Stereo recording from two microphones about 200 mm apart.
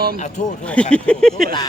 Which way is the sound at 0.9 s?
5° left (ahead or behind).